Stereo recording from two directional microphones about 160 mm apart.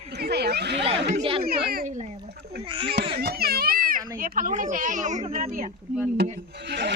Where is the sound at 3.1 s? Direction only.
85° right; by 5.5 s 45° right (ahead or behind).